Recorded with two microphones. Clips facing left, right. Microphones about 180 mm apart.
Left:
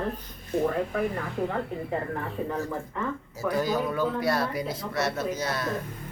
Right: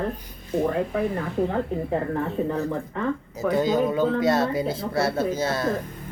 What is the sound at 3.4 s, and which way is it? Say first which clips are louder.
Speech: right 5 dB; 20° right (ahead or behind).